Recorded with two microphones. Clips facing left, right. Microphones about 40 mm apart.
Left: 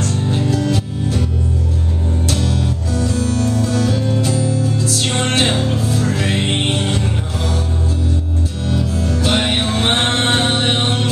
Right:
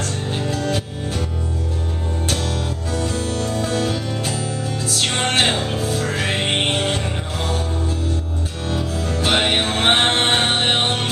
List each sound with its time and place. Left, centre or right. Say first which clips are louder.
0.5 s music: left 3 dB; right
2.2 s music: left 3 dB; right
8.6 s music: left 3 dB; right